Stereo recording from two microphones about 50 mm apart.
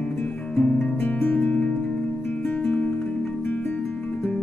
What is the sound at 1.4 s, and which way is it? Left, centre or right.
Music, left.